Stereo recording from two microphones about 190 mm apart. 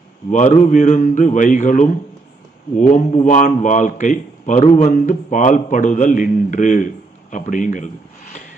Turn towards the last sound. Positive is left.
turn(degrees=40)  # may be behind; listen again after turning